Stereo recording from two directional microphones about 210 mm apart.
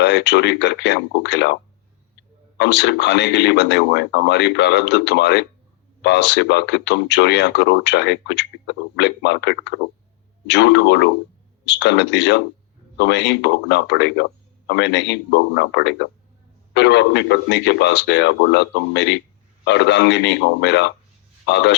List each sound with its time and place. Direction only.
0.0 s speech: 55° left (ahead or behind)
2.6 s speech: 55° left (ahead or behind)